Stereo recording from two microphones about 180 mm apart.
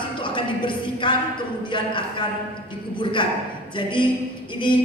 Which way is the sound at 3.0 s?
25° left (ahead or behind).